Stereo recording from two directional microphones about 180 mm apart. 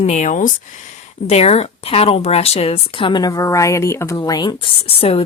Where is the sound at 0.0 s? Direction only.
40° left (ahead or behind).